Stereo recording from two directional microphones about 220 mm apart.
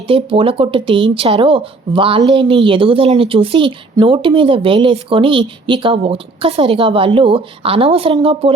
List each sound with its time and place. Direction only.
0.1 s speech: 25° right (ahead or behind)